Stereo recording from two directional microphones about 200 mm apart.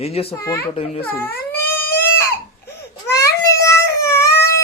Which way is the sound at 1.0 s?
10° left (ahead or behind).